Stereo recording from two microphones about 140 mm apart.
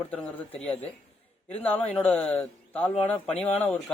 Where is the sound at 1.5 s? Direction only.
10° left (ahead or behind).